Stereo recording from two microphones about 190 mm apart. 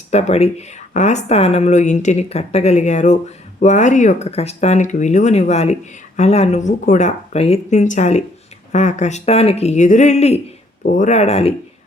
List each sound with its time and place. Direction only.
0.1 s speech: 35° left (ahead or behind)